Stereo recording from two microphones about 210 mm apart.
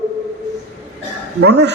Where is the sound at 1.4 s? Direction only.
55° right (ahead or behind).